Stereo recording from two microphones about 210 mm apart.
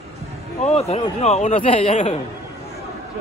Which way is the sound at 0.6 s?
30° left (ahead or behind).